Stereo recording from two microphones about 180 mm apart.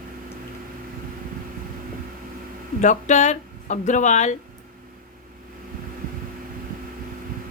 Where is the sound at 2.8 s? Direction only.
45° left (ahead or behind).